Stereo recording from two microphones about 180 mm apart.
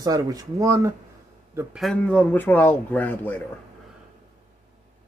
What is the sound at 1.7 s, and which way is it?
A man's voice, 5° left (ahead or behind).